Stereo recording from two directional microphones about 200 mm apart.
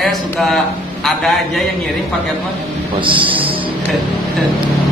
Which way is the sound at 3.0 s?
25° right (ahead or behind).